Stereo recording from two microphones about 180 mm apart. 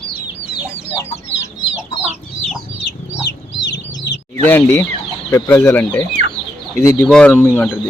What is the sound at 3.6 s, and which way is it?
Chicken, 70° left (ahead or behind).